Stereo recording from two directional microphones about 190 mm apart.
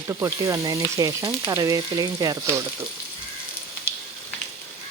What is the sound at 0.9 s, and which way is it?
Frying, 20° right (ahead or behind).